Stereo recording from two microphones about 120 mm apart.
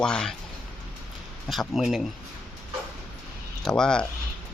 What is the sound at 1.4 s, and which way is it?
Speech, centre (ahead or behind).